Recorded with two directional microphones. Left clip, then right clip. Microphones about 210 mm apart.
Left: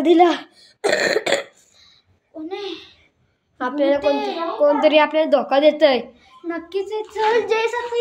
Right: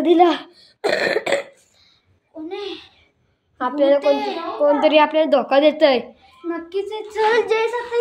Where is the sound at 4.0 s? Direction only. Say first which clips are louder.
Right 1 dB; 20° right (ahead or behind).